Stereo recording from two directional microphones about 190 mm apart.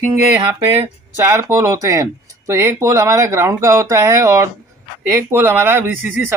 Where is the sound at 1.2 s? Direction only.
15° right (ahead or behind).